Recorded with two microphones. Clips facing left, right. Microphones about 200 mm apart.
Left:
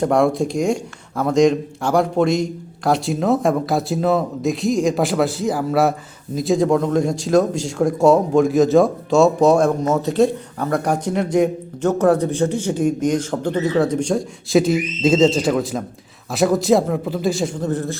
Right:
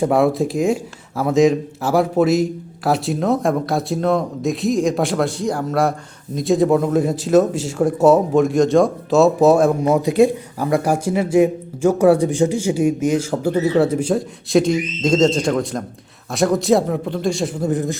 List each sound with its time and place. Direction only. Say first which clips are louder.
0.0 s speech: right 1 dB; 5° right (ahead or behind)
17.6 s a man's voice: right 2 dB; 15° right (ahead or behind)